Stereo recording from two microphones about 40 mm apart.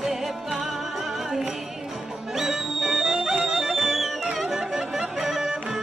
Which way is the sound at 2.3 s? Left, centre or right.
Centre.